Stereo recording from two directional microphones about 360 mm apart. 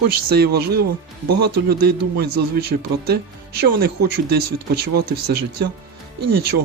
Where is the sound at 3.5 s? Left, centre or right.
Right.